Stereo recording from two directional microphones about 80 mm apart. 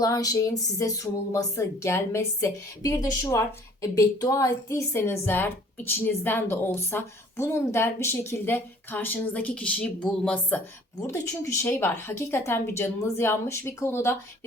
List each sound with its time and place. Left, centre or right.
0.0 s a woman's voice: left; by 10.6 s centre
11.0 s speech: left